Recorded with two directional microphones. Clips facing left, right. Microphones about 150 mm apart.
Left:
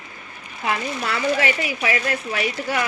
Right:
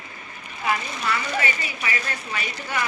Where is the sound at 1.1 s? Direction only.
90° left.